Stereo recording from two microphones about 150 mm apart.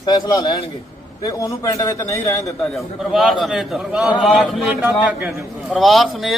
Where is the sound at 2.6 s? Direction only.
Centre (ahead or behind).